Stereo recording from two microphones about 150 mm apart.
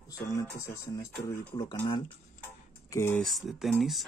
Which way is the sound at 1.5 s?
30° left (ahead or behind).